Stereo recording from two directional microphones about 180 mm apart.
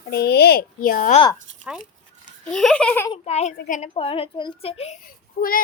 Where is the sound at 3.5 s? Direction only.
55° left (ahead or behind).